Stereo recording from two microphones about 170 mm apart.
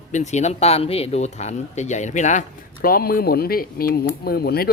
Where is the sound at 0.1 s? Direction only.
45° left (ahead or behind).